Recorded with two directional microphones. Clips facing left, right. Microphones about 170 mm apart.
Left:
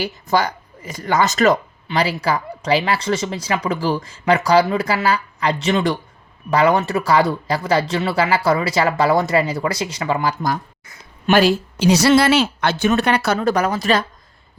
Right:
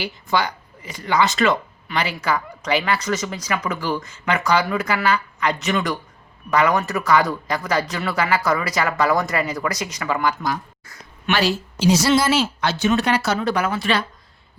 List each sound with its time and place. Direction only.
0.0 s speech: 45° left (ahead or behind)
1.9 s speech: 30° left (ahead or behind)
11.3 s speech: 50° left (ahead or behind)